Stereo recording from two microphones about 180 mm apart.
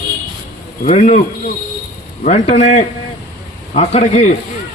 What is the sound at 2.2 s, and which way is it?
A man's voice, 40° left (ahead or behind).